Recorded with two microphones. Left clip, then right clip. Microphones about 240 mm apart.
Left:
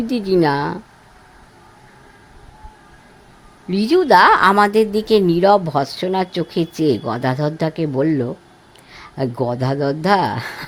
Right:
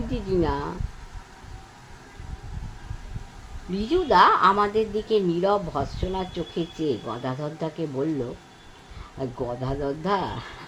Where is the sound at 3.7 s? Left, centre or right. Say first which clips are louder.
Left 8 dB; left.